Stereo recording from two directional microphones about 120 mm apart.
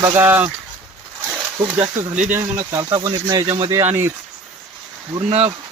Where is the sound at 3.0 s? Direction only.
35° right (ahead or behind).